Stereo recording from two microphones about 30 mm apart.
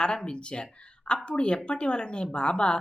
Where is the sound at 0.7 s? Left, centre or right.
Left.